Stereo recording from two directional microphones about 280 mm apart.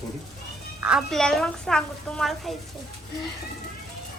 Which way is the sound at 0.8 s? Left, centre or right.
Centre.